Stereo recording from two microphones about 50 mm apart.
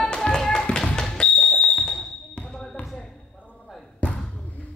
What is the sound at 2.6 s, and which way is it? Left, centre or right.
Basketball bounce, centre.